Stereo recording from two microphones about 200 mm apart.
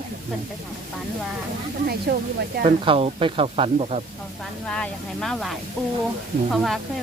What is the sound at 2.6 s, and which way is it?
Speech, 30° right (ahead or behind).